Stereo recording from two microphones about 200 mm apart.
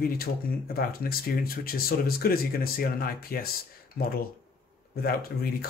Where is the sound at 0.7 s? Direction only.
50° left (ahead or behind).